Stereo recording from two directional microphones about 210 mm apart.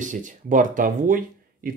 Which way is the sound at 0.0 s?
35° right (ahead or behind).